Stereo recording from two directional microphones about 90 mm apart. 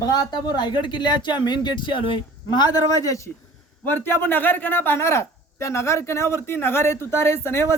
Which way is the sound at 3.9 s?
25° left (ahead or behind).